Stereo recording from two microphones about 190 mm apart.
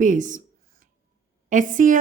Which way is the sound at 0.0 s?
40° right (ahead or behind).